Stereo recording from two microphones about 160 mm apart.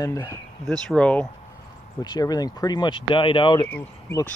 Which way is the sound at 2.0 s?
25° left (ahead or behind).